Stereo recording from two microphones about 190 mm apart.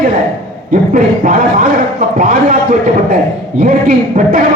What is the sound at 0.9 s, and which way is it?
A man's voice, 45° right (ahead or behind).